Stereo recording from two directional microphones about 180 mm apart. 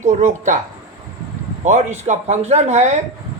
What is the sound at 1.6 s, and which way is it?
A man's voice, 40° right (ahead or behind).